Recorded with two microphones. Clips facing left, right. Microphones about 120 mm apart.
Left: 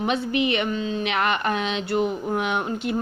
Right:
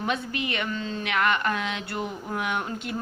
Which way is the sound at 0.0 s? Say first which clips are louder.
Left 6 dB; 20° left (ahead or behind).